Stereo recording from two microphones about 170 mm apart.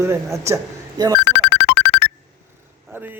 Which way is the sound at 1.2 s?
90° left.